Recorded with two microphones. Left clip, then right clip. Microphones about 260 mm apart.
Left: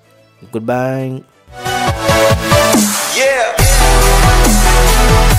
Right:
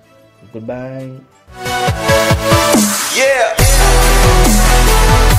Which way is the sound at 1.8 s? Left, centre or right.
Centre.